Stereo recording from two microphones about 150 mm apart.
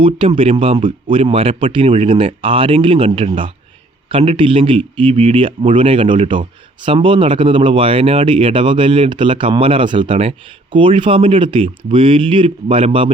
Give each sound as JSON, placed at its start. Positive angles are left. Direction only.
{"t": 0.0, "sound": "speech", "side_deg": -35}